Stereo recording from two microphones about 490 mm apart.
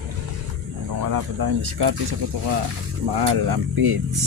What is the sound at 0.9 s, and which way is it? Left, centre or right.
Speech, right.